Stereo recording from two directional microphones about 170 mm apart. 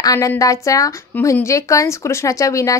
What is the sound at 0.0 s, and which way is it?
Speech, 20° left (ahead or behind).